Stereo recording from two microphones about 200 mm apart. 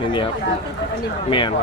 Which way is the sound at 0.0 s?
25° left (ahead or behind).